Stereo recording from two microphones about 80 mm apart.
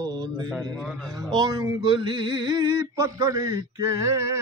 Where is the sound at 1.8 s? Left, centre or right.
Right.